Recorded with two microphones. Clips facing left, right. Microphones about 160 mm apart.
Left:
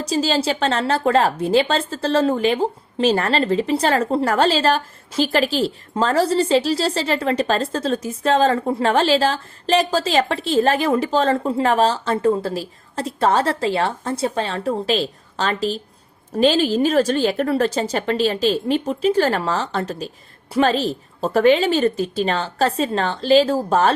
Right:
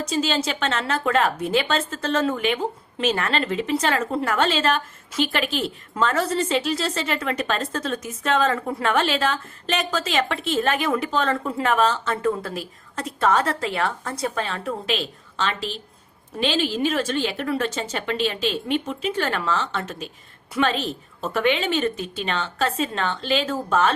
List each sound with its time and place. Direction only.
0.0 s a woman's voice: 35° left (ahead or behind)